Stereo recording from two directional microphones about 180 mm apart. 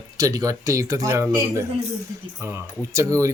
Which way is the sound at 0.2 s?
20° right (ahead or behind).